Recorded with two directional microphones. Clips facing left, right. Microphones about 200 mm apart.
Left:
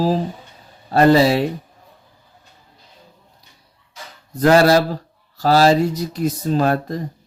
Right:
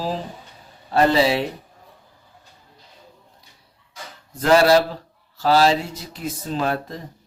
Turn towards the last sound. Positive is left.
turn(degrees=40)  # may be behind; listen again after turning